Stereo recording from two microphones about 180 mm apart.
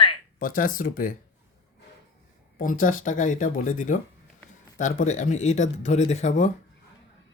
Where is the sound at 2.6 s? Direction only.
45° left (ahead or behind).